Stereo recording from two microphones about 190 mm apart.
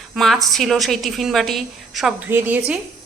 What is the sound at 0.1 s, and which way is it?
Speech, centre (ahead or behind).